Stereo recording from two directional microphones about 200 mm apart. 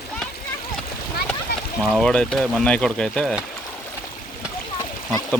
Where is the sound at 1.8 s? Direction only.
5° left (ahead or behind).